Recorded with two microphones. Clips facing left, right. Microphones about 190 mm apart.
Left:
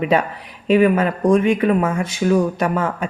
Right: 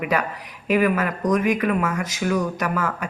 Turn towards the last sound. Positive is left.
turn(degrees=25)  # may be behind; listen again after turning